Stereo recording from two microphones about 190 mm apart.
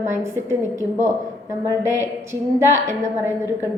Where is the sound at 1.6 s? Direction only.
15° right (ahead or behind).